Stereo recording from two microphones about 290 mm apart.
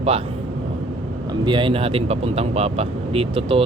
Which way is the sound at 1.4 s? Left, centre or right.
Centre.